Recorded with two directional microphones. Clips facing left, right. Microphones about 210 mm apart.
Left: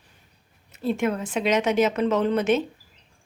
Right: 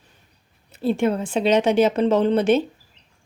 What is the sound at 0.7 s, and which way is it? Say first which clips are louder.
Speech: right 4 dB; 30° right (ahead or behind).